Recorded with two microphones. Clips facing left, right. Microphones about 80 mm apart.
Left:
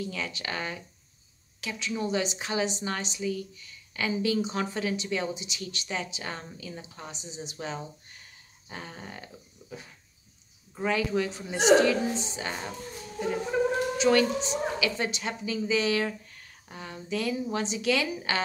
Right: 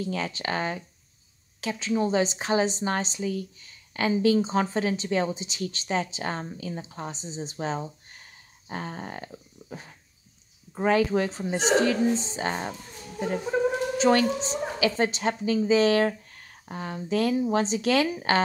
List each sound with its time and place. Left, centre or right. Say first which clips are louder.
0.0 s a woman's voice: right 4 dB; right
13.5 s speech: right 2 dB; centre
13.9 s a woman's voice: right 2 dB; right